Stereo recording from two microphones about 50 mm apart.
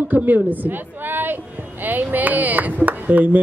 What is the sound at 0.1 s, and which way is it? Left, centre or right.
Speech, right.